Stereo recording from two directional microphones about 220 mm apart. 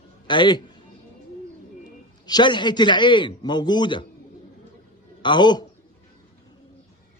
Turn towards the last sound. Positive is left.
turn(degrees=20)  # may be behind; listen again after turning